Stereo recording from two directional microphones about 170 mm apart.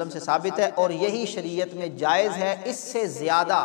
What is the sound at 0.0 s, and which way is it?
A man's voice, 25° left (ahead or behind).